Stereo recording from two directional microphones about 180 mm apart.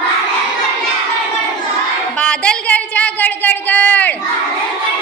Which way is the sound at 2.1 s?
5° left (ahead or behind).